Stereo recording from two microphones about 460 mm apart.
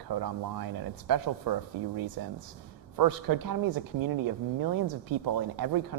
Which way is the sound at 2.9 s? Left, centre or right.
Right.